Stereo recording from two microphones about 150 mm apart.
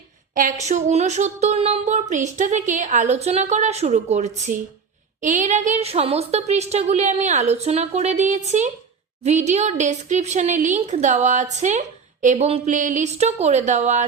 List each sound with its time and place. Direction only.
0.3 s a woman's voice: 55° right (ahead or behind)
12.5 s a sound: 40° right (ahead or behind)
12.7 s speech: 55° right (ahead or behind)